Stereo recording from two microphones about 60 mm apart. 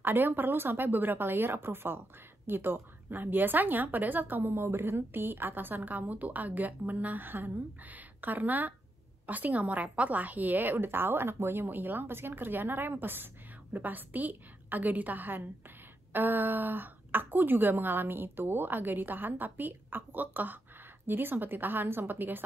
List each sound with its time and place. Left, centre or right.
0.0 s a woman's voice: right